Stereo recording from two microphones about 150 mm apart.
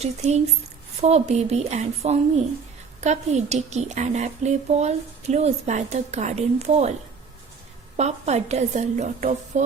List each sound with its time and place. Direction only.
0.0 s a woman's voice: 45° right (ahead or behind)
7.9 s a woman's voice: 50° right (ahead or behind)